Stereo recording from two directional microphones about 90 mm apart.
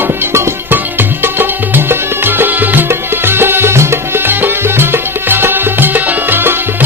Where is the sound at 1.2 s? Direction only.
25° right (ahead or behind).